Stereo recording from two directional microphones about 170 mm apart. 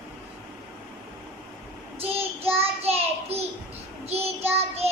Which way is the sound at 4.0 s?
35° right (ahead or behind).